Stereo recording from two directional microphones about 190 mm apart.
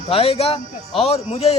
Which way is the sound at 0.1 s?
30° left (ahead or behind).